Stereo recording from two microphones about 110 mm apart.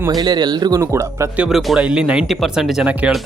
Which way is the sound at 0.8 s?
25° right (ahead or behind).